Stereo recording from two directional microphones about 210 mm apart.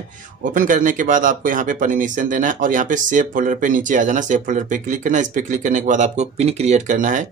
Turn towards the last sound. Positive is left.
turn(degrees=-35)  # may be behind; listen again after turning